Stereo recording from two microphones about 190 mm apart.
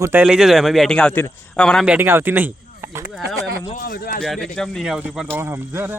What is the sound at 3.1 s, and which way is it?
Speech, centre (ahead or behind).